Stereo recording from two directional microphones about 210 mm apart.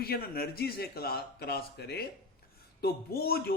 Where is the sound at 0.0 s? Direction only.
45° left (ahead or behind).